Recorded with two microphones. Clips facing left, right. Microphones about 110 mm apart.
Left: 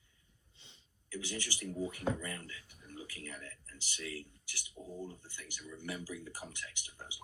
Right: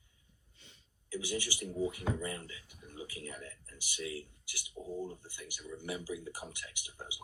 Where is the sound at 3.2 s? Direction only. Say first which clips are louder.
Right 2 dB; 20° right (ahead or behind).